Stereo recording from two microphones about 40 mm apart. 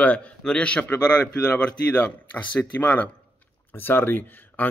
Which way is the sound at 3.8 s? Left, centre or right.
Left.